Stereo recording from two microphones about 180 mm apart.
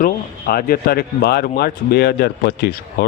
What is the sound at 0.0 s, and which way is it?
Speech, 55° left (ahead or behind).